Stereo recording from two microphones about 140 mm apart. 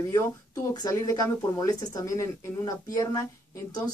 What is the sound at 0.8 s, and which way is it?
Speech, 20° left (ahead or behind).